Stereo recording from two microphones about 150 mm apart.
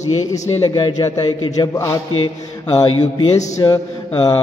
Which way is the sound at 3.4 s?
20° left (ahead or behind).